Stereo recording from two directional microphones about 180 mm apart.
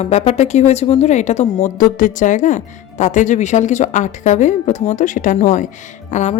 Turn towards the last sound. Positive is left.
turn(degrees=40)  # may be behind; listen again after turning